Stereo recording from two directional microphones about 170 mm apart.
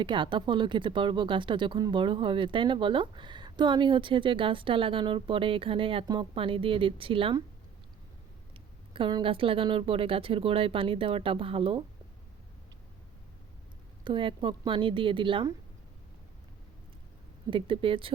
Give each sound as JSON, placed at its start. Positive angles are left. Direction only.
{"t": 0.0, "sound": "speech", "side_deg": -30}
{"t": 8.9, "sound": "a woman's voice", "side_deg": -30}
{"t": 14.0, "sound": "speech", "side_deg": -30}
{"t": 17.5, "sound": "a woman's voice", "side_deg": -30}